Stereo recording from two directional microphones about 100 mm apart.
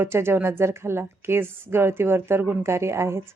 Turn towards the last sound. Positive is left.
turn(degrees=-25)  # may be behind; listen again after turning